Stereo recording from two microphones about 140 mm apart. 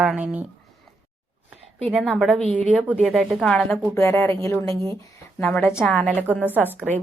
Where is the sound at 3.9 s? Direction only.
20° left (ahead or behind).